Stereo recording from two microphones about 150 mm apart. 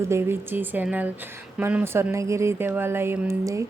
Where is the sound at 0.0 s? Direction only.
15° right (ahead or behind).